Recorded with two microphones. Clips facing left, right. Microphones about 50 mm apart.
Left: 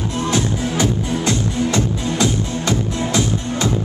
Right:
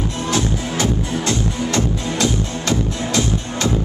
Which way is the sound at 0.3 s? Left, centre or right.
Centre.